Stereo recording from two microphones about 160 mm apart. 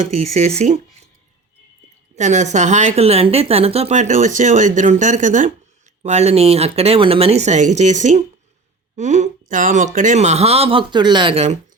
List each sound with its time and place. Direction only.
0.2 s a woman's voice: 45° right (ahead or behind)
2.1 s a woman's voice: 50° right (ahead or behind)